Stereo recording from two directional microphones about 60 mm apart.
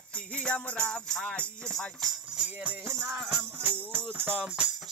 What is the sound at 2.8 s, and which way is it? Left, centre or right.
Music, right.